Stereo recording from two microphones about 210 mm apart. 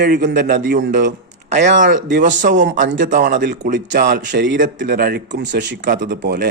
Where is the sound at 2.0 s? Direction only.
55° right (ahead or behind).